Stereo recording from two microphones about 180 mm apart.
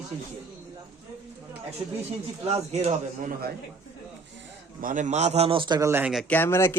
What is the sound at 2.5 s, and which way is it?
Speech, 35° right (ahead or behind).